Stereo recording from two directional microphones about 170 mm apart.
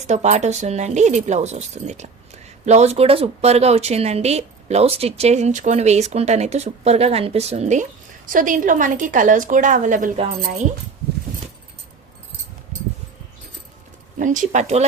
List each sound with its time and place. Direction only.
0.1 s speech: 45° right (ahead or behind)
14.2 s speech: 45° right (ahead or behind)